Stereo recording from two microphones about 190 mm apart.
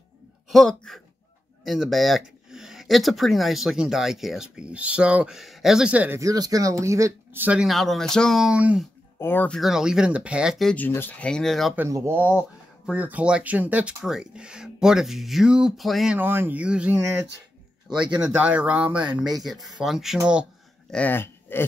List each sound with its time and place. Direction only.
0.5 s speech: centre (ahead or behind)
9.2 s speech: 10° left (ahead or behind)
11.8 s speech: 10° right (ahead or behind)
17.8 s speech: 25° right (ahead or behind)
18.1 s speech: 5° right (ahead or behind)
20.9 s speech: 10° left (ahead or behind)